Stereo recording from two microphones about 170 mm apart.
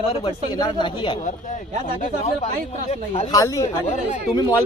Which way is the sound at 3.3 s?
20° left (ahead or behind).